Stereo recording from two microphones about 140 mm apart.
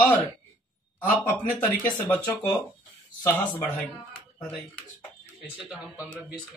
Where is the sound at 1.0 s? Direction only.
10° left (ahead or behind).